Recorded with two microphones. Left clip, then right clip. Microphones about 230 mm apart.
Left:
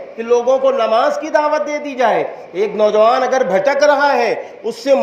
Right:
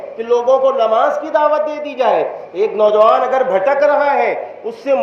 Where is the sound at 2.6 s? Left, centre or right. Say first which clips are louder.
Right 1 dB; left.